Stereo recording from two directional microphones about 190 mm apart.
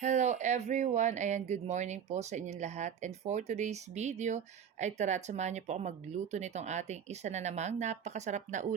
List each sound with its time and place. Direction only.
0.0 s speech: 40° right (ahead or behind)